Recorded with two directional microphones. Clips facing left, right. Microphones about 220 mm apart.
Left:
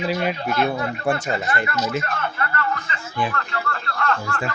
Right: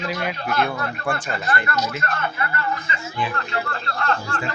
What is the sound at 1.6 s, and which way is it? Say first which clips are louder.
Speech: left 1 dB; 5° left (ahead or behind).